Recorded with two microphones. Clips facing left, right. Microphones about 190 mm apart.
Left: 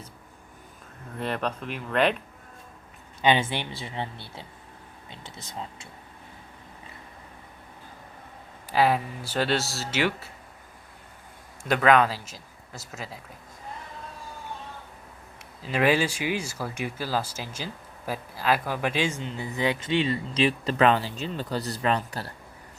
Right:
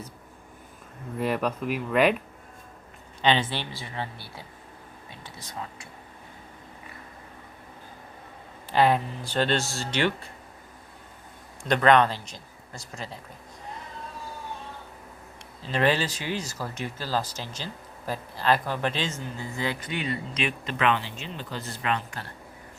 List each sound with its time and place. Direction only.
1.2 s speech: 10° right (ahead or behind)
3.2 s speech: 10° left (ahead or behind)
8.7 s speech: 5° left (ahead or behind)
11.7 s speech: 5° left (ahead or behind)
15.6 s speech: 10° left (ahead or behind); by 22.3 s 35° left (ahead or behind)